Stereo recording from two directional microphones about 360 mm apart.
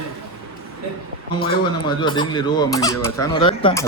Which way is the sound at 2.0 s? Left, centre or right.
Centre.